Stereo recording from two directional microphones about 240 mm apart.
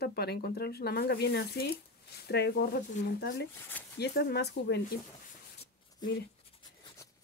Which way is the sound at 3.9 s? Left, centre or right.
Left.